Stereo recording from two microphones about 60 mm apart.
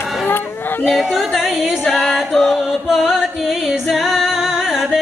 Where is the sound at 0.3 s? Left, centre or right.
Left.